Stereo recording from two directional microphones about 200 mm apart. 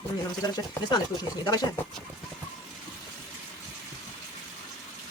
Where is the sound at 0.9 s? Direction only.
20° left (ahead or behind).